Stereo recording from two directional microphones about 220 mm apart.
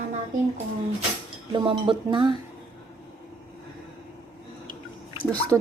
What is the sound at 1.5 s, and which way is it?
Speech, 20° right (ahead or behind).